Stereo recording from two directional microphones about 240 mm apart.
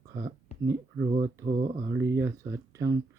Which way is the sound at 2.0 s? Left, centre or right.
Centre.